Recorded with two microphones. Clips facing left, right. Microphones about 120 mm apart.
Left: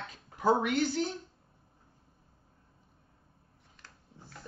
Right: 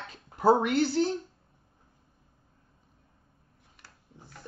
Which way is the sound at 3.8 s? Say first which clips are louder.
Right 1 dB; 10° right (ahead or behind).